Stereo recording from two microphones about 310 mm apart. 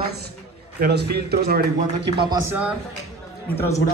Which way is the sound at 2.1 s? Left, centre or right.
Centre.